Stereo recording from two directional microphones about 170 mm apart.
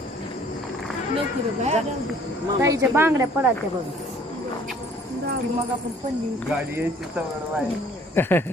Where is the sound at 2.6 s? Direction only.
15° right (ahead or behind).